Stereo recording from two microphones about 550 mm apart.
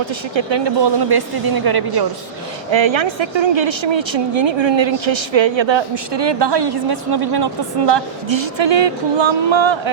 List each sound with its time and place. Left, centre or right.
0.0 s speech: right
2.6 s speech: right